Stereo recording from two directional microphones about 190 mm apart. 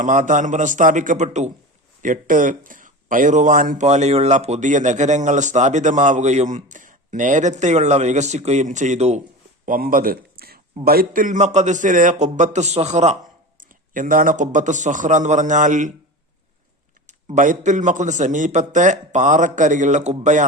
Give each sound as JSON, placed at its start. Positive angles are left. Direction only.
{"t": 0.0, "sound": "speech", "side_deg": -40}
{"t": 9.6, "sound": "a sound", "side_deg": -50}
{"t": 10.8, "sound": "speech", "side_deg": -50}
{"t": 17.1, "sound": "speech", "side_deg": -40}